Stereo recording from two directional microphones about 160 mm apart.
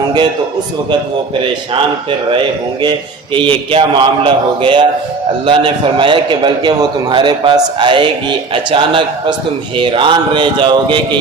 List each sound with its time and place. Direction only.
1.7 s a man's voice: 30° right (ahead or behind)